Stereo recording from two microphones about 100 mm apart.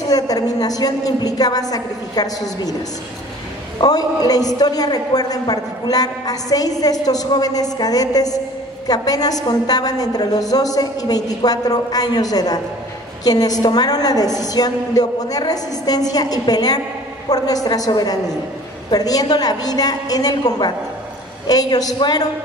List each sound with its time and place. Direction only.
0.1 s a man's voice: 40° left (ahead or behind)
3.8 s a man's voice: 40° left (ahead or behind)